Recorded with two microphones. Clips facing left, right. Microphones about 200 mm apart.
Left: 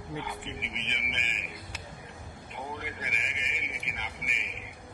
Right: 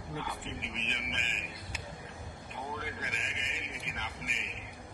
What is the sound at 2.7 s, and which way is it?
A man's voice, 15° left (ahead or behind).